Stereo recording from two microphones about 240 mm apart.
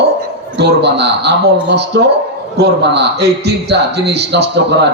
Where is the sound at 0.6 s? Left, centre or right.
Right.